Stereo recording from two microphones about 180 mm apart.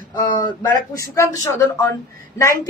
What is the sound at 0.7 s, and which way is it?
Speech, 55° right (ahead or behind).